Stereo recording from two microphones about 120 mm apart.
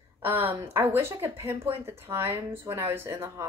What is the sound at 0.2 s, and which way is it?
A woman's voice, 20° right (ahead or behind).